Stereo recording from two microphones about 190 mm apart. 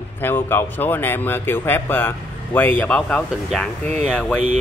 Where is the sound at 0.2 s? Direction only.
10° left (ahead or behind).